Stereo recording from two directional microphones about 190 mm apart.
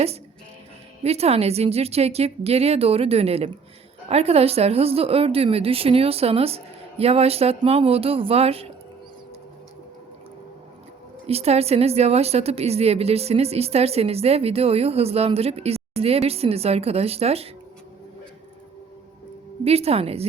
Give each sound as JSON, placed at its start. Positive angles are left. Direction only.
{"t": 1.0, "sound": "a woman's voice", "side_deg": -35}
{"t": 11.3, "sound": "a woman's voice", "side_deg": -35}
{"t": 19.6, "sound": "a woman's voice", "side_deg": -30}